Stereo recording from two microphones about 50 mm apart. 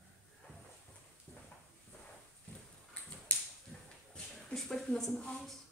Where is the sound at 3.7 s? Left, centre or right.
Centre.